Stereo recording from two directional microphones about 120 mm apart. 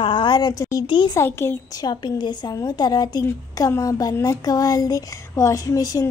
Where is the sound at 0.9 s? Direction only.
40° left (ahead or behind).